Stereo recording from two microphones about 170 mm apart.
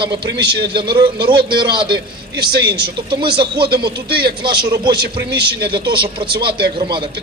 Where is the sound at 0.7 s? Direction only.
30° right (ahead or behind).